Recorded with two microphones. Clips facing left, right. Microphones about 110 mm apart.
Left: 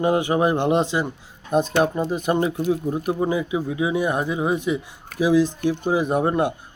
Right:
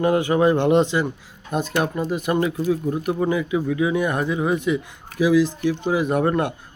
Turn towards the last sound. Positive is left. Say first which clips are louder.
# even
turn(degrees=20)  # may be behind; listen again after turning